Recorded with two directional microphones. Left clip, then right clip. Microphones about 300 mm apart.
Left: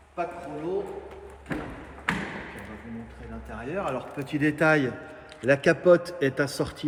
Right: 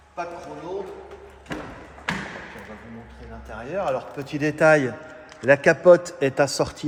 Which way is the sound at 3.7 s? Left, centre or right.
Right.